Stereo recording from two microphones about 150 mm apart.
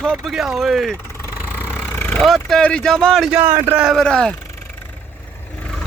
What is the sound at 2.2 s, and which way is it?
Speech, centre (ahead or behind).